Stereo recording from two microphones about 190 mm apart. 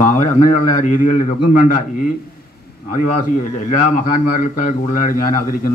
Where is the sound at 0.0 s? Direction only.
40° left (ahead or behind).